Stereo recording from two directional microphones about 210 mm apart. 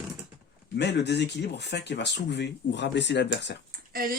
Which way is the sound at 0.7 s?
55° left (ahead or behind).